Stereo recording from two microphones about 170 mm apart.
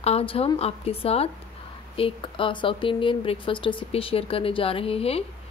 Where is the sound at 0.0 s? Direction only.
35° left (ahead or behind).